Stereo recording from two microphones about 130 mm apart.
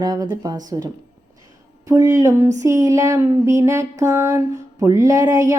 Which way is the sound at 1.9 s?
25° right (ahead or behind).